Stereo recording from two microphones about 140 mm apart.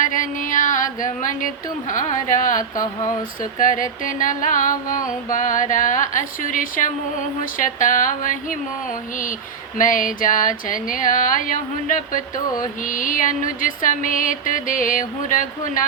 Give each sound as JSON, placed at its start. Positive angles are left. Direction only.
{"t": 0.0, "sound": "music", "side_deg": 70}
{"t": 9.7, "sound": "music", "side_deg": 70}